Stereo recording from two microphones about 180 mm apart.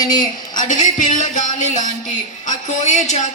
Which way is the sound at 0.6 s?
45° left (ahead or behind).